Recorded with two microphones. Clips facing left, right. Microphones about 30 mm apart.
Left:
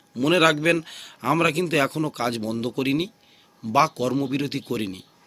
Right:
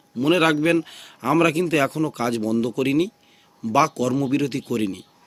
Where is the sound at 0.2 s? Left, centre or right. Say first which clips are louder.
Right 1 dB; left.